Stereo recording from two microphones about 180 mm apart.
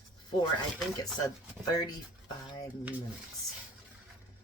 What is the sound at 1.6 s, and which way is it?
Speech, 20° left (ahead or behind).